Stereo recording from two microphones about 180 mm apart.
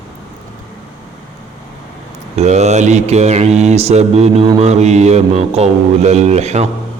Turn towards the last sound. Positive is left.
turn(degrees=-40)  # may be behind; listen again after turning